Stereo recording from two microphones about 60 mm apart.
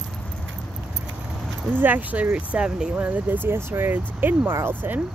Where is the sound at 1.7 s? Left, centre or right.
Right; by 2.9 s centre.